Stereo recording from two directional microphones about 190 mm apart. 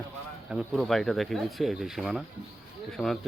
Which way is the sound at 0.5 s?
Centre (ahead or behind).